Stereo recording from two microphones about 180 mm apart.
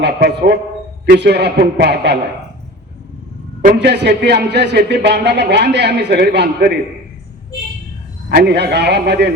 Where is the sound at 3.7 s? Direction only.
70° right (ahead or behind).